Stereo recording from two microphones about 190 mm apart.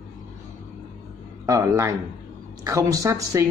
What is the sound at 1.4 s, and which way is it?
Speech, 15° right (ahead or behind).